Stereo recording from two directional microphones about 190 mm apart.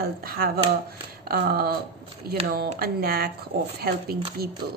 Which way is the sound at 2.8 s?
50° right (ahead or behind).